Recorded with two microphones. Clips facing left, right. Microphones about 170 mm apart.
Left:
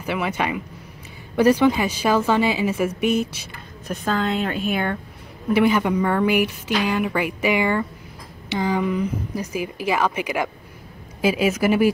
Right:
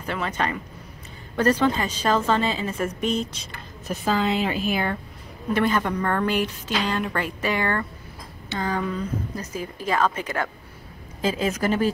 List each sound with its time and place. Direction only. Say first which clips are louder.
0.0 s a woman's voice: left 3 dB; 10° left (ahead or behind)
3.8 s a woman's voice: even; 5° right (ahead or behind)
5.5 s a woman's voice: left 4 dB; 10° left (ahead or behind)